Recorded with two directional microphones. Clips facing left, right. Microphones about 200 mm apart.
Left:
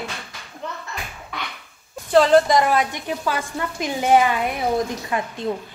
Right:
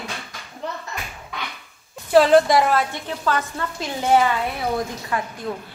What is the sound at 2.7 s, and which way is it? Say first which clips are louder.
A woman's voice: left 1 dB; 15° left (ahead or behind).